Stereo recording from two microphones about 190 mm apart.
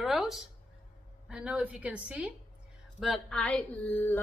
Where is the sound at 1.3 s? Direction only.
5° right (ahead or behind).